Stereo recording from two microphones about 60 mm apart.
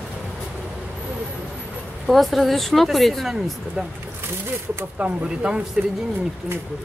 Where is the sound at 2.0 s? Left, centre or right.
Centre.